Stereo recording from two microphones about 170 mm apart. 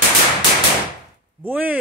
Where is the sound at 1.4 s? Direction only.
10° right (ahead or behind).